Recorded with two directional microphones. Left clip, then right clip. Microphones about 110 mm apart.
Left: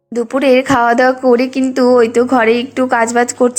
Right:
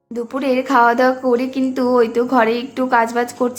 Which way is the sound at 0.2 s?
55° left (ahead or behind).